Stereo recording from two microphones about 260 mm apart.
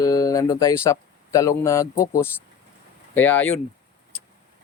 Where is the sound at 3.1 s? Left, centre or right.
Centre.